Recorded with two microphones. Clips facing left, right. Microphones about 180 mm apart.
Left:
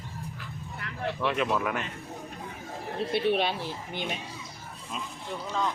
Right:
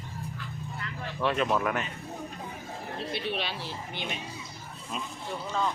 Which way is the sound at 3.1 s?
55° left (ahead or behind).